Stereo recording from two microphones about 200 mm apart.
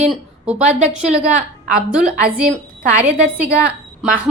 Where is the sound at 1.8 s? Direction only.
5° right (ahead or behind).